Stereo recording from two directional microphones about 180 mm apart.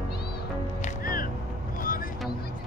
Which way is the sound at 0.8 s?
50° left (ahead or behind).